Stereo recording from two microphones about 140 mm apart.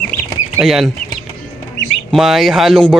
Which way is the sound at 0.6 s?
Centre (ahead or behind).